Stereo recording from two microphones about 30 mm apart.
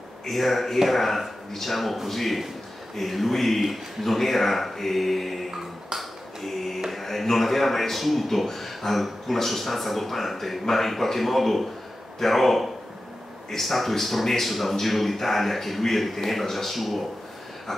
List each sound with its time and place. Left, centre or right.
0.3 s speech: centre
5.9 s a sound: centre
6.9 s speech: centre